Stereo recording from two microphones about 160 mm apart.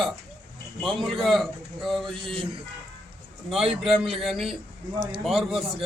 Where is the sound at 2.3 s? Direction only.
35° right (ahead or behind).